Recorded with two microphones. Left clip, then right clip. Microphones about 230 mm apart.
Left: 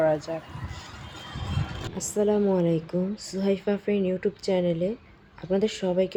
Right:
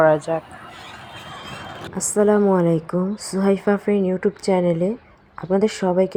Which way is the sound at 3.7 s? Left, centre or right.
Centre.